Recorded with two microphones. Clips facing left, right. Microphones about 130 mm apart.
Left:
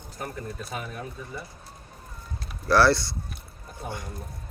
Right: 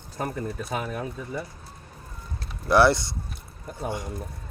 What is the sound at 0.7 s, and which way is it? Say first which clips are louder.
Speech: right 6 dB; 90° right.